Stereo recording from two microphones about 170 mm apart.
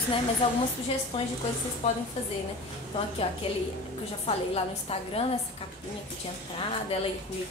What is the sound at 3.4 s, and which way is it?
A woman's voice, 35° left (ahead or behind).